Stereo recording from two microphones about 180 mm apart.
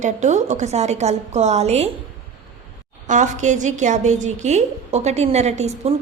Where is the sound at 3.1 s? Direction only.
40° right (ahead or behind).